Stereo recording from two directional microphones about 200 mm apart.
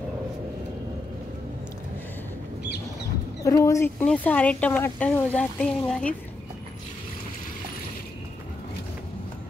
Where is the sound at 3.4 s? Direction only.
15° left (ahead or behind).